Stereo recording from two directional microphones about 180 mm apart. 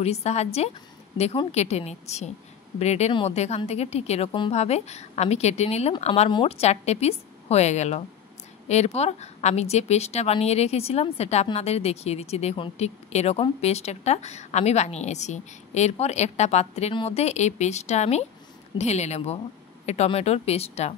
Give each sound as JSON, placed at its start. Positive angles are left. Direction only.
{"t": 0.0, "sound": "a woman's voice", "side_deg": 35}